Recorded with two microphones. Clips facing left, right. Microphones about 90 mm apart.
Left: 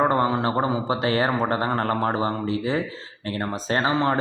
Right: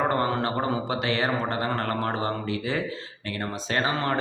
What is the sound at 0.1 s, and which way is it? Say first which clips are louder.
Speech: left 4 dB; 25° left (ahead or behind).